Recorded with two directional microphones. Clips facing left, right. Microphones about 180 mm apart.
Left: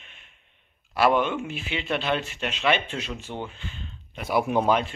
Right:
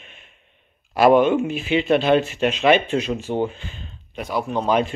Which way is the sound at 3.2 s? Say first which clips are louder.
Right 11 dB; 40° right (ahead or behind).